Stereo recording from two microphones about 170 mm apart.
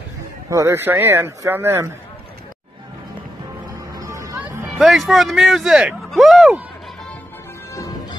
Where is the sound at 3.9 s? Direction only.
20° right (ahead or behind).